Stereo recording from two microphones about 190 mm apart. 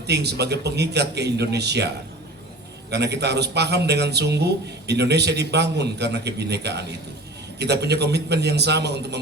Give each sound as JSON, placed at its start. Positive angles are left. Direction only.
{"t": 0.1, "sound": "a man's voice", "side_deg": -60}
{"t": 2.9, "sound": "a man's voice", "side_deg": -60}